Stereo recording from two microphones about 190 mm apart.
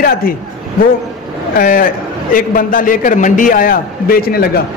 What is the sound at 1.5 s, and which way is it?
A man's voice, 50° left (ahead or behind).